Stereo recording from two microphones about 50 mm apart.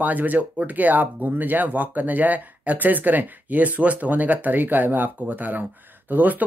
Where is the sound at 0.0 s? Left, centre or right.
Right.